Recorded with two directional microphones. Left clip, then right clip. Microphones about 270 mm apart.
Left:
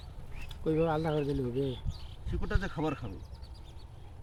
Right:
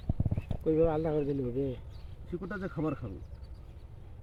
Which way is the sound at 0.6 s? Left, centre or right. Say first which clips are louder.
Right 2 dB; left.